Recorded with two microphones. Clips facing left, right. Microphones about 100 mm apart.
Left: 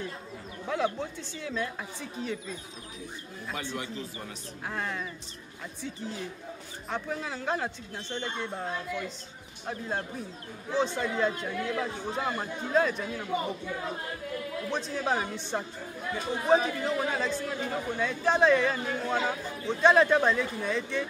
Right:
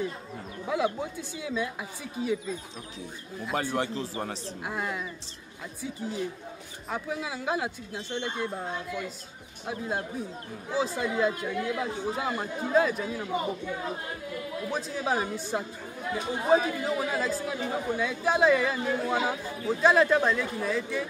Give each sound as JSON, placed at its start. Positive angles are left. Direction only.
{"t": 0.7, "sound": "speech", "side_deg": -10}
{"t": 3.5, "sound": "speech", "side_deg": -40}
{"t": 4.6, "sound": "speech", "side_deg": -10}
{"t": 6.9, "sound": "speech", "side_deg": -5}
{"t": 14.7, "sound": "speech", "side_deg": -5}